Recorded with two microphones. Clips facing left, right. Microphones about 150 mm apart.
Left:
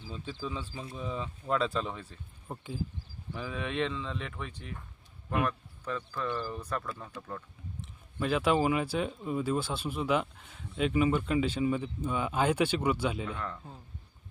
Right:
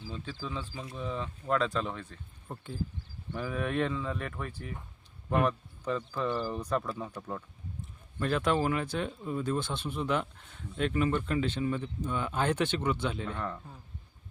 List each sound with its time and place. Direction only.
0.4 s speech: 10° left (ahead or behind); by 7.4 s 10° right (ahead or behind)
8.2 s speech: 5° left (ahead or behind)